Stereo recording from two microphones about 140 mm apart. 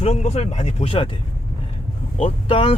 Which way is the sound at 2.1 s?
45° left (ahead or behind).